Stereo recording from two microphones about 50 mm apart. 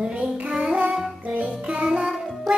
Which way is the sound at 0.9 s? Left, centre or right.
Centre.